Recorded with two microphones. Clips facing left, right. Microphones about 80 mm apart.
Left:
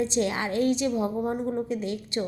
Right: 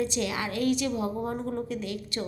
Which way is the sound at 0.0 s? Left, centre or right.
Left.